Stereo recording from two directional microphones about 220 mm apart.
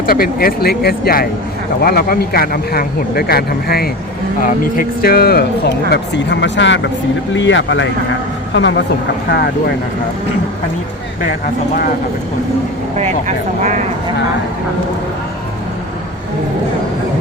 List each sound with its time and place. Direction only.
0.0 s speech: 45° left (ahead or behind)
13.0 s speech: 30° right (ahead or behind)